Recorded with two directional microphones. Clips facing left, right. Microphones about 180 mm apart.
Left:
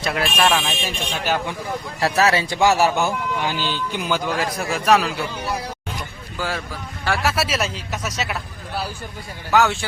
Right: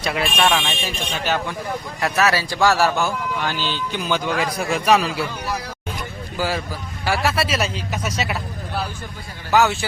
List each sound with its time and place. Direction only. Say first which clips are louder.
0.0 s a man's voice: even; centre (ahead or behind)
1.2 s speech: even; 10° left (ahead or behind)
2.0 s speech: left 2 dB; 30° left (ahead or behind); by 4.2 s 10° left (ahead or behind)
4.3 s a man's voice: right 1 dB; centre (ahead or behind)
7.0 s a man's voice: right 1 dB; centre (ahead or behind)
9.5 s a man's voice: right 1 dB; centre (ahead or behind)